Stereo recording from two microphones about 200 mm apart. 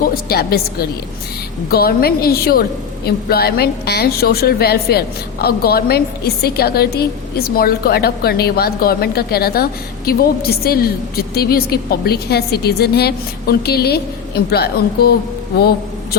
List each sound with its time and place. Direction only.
0.0 s a woman's voice: 50° left (ahead or behind)